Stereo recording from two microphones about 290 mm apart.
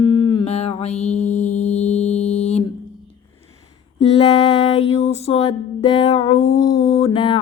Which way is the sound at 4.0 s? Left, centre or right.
Left.